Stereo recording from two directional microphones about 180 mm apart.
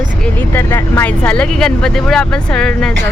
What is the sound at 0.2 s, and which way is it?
Speech, 10° left (ahead or behind).